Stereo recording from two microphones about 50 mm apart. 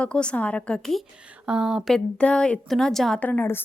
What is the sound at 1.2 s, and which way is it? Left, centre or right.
Speech, centre.